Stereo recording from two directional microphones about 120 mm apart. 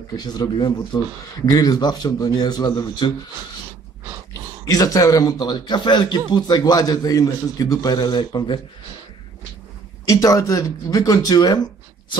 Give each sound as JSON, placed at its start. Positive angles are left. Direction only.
{"t": 0.1, "sound": "a man's voice", "side_deg": 35}
{"t": 4.6, "sound": "a man's voice", "side_deg": 30}
{"t": 10.0, "sound": "a man's voice", "side_deg": 30}